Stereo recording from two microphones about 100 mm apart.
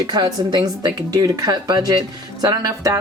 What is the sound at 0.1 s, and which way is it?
Speech, 45° right (ahead or behind).